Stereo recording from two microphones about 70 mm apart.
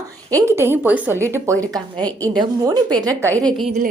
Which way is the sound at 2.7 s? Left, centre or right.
Right.